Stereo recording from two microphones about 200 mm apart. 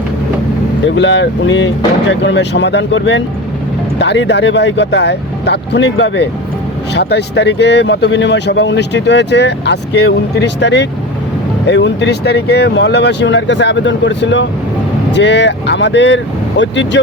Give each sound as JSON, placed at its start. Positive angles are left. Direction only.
{"t": 0.9, "sound": "speech", "side_deg": 65}